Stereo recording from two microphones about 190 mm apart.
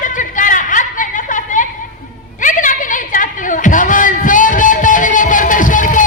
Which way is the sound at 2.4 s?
45° left (ahead or behind).